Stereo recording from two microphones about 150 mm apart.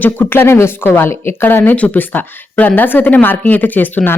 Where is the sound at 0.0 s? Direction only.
15° left (ahead or behind).